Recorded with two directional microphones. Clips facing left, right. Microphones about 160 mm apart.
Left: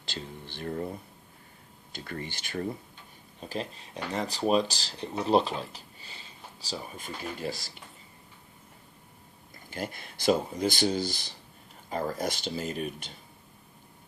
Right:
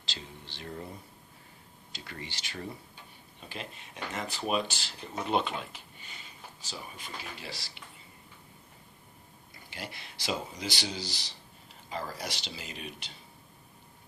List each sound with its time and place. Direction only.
0.0 s a sound: 55° left (ahead or behind)
1.9 s speech: 50° left (ahead or behind)
3.5 s speech: 35° left (ahead or behind)
9.6 s speech: 45° left (ahead or behind)